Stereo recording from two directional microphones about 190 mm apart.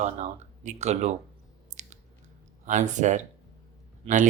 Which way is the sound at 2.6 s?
40° right (ahead or behind).